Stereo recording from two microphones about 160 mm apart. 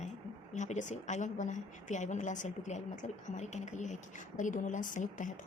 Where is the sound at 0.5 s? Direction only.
50° left (ahead or behind).